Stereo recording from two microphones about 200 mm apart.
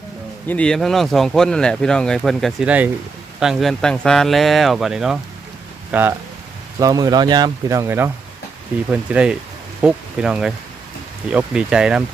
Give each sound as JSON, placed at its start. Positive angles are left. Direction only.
{"t": 0.4, "sound": "speech", "side_deg": 5}